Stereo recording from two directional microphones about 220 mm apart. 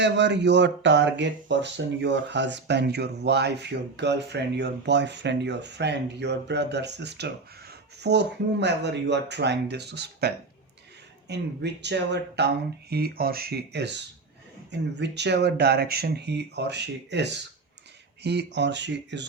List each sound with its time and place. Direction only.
0.0 s speech: 50° right (ahead or behind)